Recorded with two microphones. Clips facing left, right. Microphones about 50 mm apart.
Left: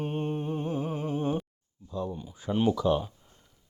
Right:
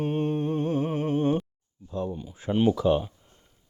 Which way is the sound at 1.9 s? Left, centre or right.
Right.